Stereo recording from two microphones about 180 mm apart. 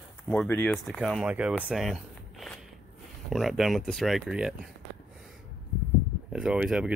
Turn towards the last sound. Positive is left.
turn(degrees=-5)  # may be behind; listen again after turning